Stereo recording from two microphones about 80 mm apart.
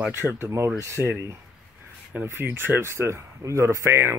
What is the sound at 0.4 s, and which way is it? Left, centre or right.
Speech, right.